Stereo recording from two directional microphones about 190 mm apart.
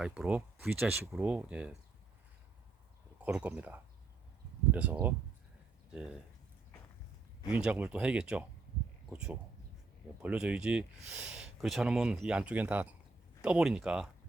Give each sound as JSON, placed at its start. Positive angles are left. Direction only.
{"t": 0.0, "sound": "speech", "side_deg": -5}
{"t": 3.2, "sound": "speech", "side_deg": -5}
{"t": 7.5, "sound": "speech", "side_deg": -5}